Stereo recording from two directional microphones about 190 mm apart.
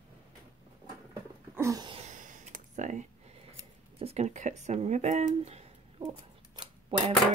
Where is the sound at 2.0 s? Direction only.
40° right (ahead or behind).